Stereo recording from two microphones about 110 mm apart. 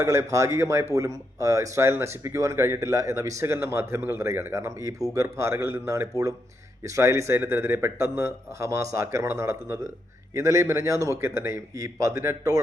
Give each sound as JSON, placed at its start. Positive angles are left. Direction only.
{"t": 0.0, "sound": "speech", "side_deg": -25}